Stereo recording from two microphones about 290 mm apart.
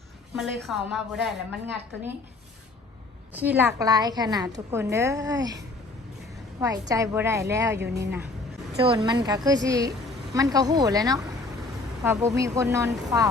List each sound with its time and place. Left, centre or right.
0.3 s a woman's voice: centre
3.6 s a woman's voice: centre
6.6 s a woman's voice: centre
7.8 s speech: right
8.9 s a woman's voice: centre